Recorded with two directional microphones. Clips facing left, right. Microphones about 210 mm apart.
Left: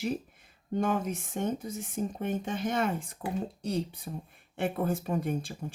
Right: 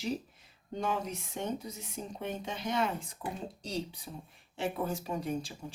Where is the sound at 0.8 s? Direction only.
50° left (ahead or behind).